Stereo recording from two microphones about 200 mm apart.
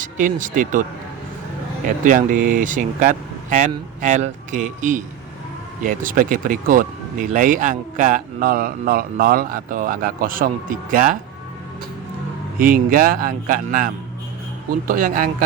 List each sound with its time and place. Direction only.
0.0 s speech: 40° right (ahead or behind)
2.0 s speech: 40° right (ahead or behind)
12.6 s speech: 45° right (ahead or behind)